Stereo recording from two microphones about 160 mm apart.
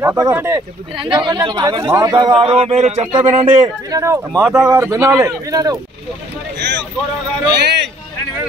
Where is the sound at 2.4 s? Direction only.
40° right (ahead or behind).